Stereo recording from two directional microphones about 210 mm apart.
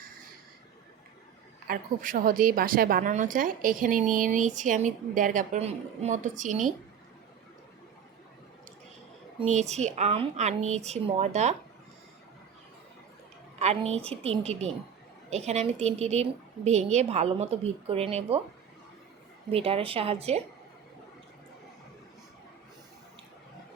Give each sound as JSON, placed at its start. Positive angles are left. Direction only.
{"t": 1.6, "sound": "a woman's voice", "side_deg": -40}
{"t": 9.4, "sound": "a woman's voice", "side_deg": -30}
{"t": 13.6, "sound": "a woman's voice", "side_deg": -30}
{"t": 19.5, "sound": "a woman's voice", "side_deg": -30}